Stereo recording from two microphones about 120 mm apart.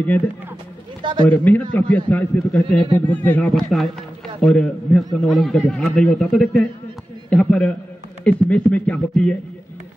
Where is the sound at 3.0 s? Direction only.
15° left (ahead or behind).